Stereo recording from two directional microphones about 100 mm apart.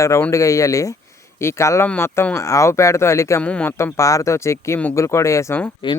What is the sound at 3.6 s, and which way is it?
Speech, 25° left (ahead or behind).